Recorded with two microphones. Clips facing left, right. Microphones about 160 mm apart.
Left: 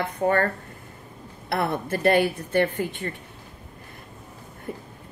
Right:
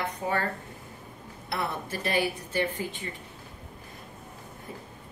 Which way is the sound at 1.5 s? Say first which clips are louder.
Left 7 dB; 55° left (ahead or behind).